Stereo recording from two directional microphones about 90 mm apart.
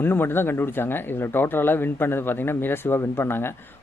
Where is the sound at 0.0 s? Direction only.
25° left (ahead or behind).